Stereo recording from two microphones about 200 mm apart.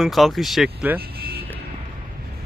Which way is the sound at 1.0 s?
50° right (ahead or behind).